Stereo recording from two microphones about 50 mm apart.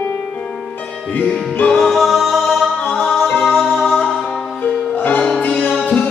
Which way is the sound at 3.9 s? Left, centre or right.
Centre.